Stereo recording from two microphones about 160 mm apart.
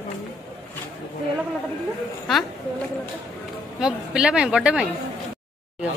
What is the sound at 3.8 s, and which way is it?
A woman's voice, 5° right (ahead or behind).